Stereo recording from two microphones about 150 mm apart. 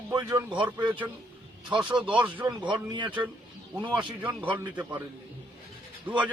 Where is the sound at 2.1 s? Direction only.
10° right (ahead or behind).